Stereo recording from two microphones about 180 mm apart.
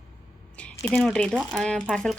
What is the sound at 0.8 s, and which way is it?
A woman's voice, 5° left (ahead or behind).